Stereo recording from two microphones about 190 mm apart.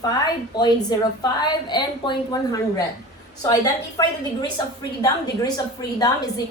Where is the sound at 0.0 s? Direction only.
20° left (ahead or behind).